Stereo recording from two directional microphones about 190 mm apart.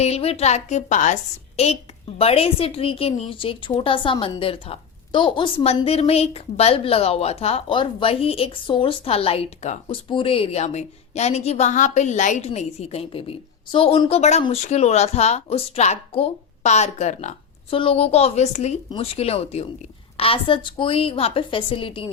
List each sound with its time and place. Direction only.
0.0 s a woman's voice: 35° left (ahead or behind)